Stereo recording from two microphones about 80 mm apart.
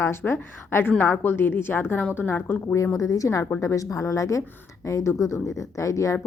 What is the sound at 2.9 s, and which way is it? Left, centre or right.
Speech, left.